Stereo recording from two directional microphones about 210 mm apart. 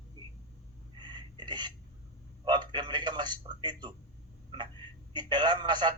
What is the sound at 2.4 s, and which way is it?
A man's voice, 20° right (ahead or behind).